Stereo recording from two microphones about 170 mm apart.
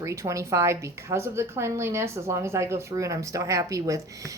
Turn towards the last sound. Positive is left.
turn(degrees=-20)  # may be behind; listen again after turning